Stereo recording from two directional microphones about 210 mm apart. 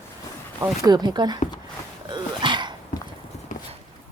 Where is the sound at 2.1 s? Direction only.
20° right (ahead or behind).